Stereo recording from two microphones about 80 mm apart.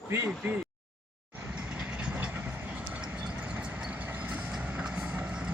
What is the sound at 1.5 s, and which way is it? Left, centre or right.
Train, centre.